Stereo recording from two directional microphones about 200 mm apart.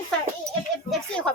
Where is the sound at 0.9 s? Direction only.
5° left (ahead or behind).